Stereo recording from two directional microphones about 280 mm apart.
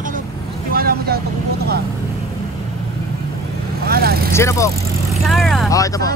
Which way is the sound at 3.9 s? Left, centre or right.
Right.